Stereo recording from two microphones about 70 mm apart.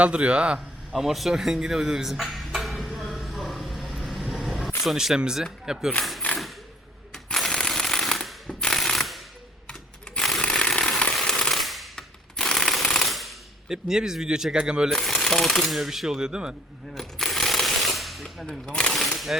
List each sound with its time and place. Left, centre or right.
0.0 s speech: centre
0.9 s music: centre
4.8 s speech: centre
6.3 s a sound: centre
7.1 s ratchet: centre
10.2 s a sound: centre
10.4 s chainsaw: centre
11.1 s a sound: centre
14.9 s speech: centre
16.9 s a sound: centre
18.7 s speech: centre
18.9 s speech: centre